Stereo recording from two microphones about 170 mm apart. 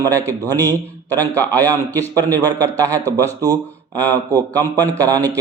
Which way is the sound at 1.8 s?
20° right (ahead or behind).